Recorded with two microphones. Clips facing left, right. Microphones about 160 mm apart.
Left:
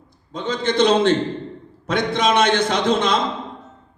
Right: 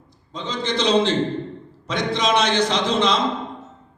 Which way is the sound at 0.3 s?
55° left (ahead or behind).